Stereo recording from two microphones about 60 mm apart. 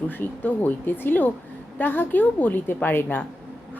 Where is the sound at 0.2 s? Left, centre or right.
Left.